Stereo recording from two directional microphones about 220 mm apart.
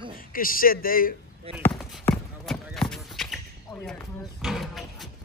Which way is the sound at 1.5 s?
25° right (ahead or behind).